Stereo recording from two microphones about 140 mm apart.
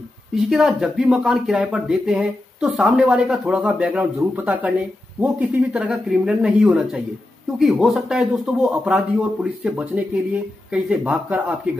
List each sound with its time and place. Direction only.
0.3 s speech: centre (ahead or behind)